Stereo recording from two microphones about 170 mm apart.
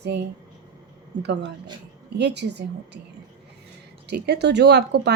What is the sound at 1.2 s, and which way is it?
A woman's voice, 90° right.